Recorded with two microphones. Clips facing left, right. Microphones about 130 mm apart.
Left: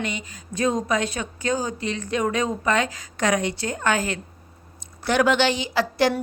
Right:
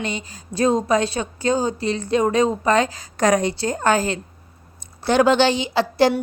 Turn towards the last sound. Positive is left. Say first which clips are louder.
# right 4 dB
turn(degrees=-25)  # may be behind; listen again after turning